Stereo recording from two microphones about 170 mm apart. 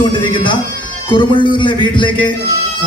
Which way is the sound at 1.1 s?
30° left (ahead or behind).